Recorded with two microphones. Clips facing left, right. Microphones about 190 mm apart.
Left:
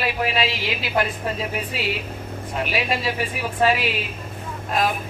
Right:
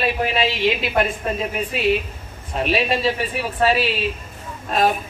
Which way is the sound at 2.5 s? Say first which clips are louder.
Right 4 dB; 25° right (ahead or behind).